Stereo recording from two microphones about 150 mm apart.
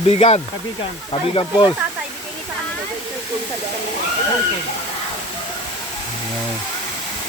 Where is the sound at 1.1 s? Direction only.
35° left (ahead or behind).